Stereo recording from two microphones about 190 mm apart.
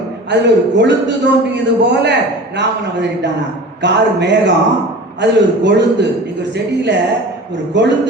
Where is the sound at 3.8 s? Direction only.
65° right (ahead or behind).